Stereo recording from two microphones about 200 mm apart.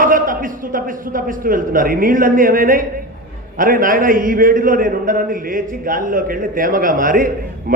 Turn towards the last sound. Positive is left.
turn(degrees=-45)  # may be behind; listen again after turning